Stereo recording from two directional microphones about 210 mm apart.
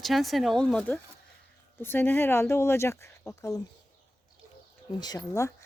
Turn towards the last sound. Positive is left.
turn(degrees=15)  # may be behind; listen again after turning